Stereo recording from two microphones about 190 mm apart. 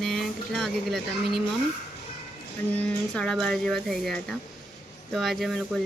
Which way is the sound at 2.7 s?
5° left (ahead or behind).